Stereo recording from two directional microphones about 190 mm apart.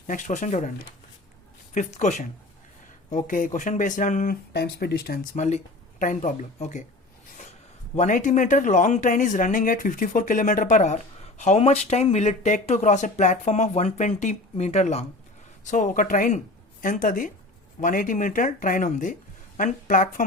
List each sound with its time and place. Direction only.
0.1 s speech: 40° left (ahead or behind)
1.7 s speech: 40° left (ahead or behind)
7.9 s speech: 40° left (ahead or behind)